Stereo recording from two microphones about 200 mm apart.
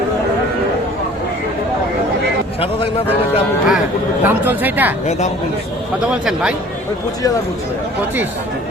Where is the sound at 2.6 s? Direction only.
30° left (ahead or behind).